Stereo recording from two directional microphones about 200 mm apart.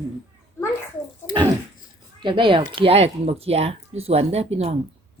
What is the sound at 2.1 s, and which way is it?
Speech, 25° right (ahead or behind).